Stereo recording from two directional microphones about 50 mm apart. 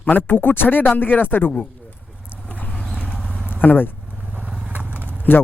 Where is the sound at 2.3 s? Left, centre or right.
Left.